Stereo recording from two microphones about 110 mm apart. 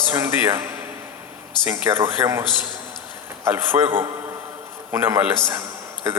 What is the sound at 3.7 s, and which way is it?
Speech, 40° right (ahead or behind).